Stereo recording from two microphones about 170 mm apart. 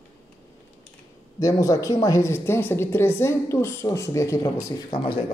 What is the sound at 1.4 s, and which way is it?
A woman's voice, 20° left (ahead or behind).